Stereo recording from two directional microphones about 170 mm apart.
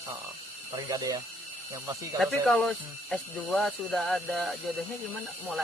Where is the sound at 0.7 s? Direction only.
20° right (ahead or behind).